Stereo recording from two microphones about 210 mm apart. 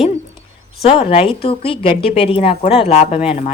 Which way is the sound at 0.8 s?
25° left (ahead or behind).